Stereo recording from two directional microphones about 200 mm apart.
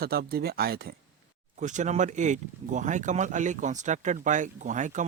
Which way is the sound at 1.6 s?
35° right (ahead or behind).